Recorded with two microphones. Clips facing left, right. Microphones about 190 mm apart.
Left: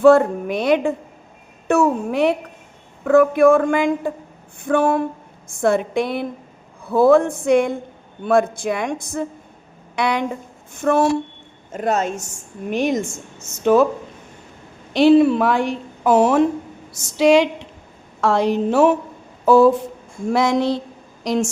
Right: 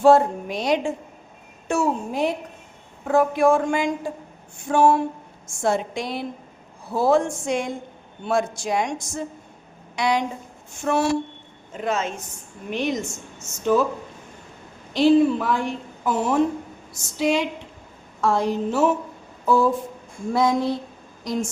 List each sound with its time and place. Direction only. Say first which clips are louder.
0.0 s a woman's voice: left 4 dB; 60° left (ahead or behind)
11.7 s a woman's voice: left 5 dB; 40° left (ahead or behind)
14.9 s a woman's voice: left 4 dB; 70° left (ahead or behind)
17.2 s a sound: left 8 dB; 85° left
18.2 s a woman's voice: left 4 dB; 75° left (ahead or behind)
19.5 s a woman's voice: left 7 dB; 75° left (ahead or behind)
20.3 s a sound: left 3 dB; 80° left